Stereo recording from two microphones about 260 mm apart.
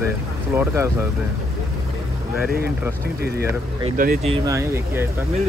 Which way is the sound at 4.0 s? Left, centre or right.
Right.